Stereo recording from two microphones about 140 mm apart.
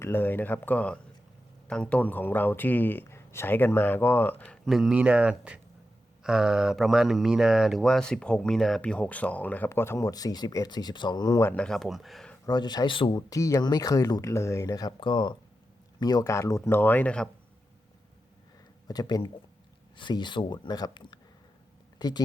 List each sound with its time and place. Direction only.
0.0 s speech: 15° left (ahead or behind)
11.4 s speech: 10° left (ahead or behind)
12.5 s speech: 30° left (ahead or behind); by 17.2 s 10° left (ahead or behind)
18.9 s speech: 30° left (ahead or behind)